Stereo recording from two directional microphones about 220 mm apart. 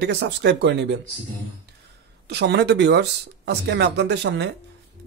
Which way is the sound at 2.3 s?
50° right (ahead or behind).